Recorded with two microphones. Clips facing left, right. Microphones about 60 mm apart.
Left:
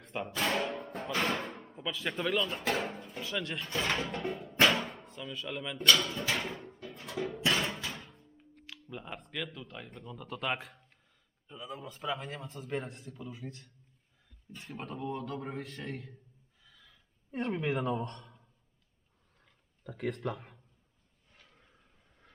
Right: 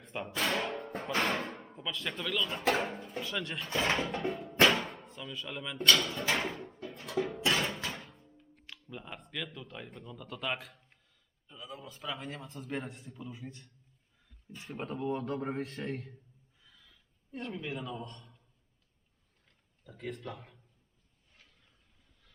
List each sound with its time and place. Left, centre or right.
0.0 s music: centre
1.2 s speech: centre
6.3 s pigeon: centre
7.2 s speech: centre
7.5 s a sound: centre
7.9 s music: centre
8.6 s speech: centre
16.6 s a sound: centre
17.3 s a man's voice: left
19.8 s speech: left
21.4 s a sound: left